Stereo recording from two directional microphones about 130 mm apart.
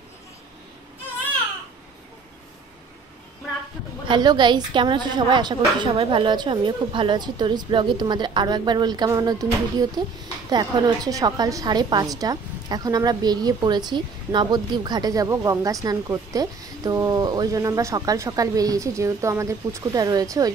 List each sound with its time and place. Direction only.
4.1 s a woman's voice: 35° right (ahead or behind)